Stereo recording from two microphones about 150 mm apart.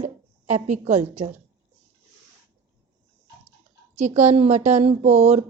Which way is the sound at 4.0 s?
50° right (ahead or behind).